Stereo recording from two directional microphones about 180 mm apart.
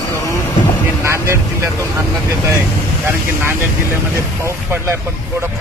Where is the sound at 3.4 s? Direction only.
10° right (ahead or behind).